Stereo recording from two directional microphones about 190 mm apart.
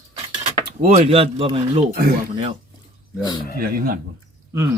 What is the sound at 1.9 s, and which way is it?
Speech, 50° right (ahead or behind).